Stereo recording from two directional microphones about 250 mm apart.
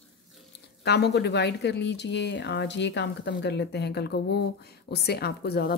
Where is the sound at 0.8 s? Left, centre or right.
Left.